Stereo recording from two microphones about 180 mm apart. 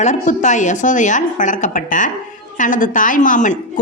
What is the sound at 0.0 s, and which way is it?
Speech, 40° left (ahead or behind).